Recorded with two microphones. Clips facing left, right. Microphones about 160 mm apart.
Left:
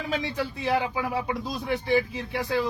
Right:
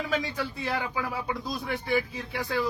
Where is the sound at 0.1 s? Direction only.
20° left (ahead or behind).